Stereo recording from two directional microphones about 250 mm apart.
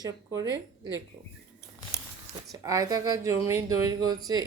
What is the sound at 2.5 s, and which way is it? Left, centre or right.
A woman's voice, centre.